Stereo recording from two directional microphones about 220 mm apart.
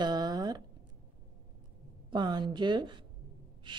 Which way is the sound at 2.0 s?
20° right (ahead or behind).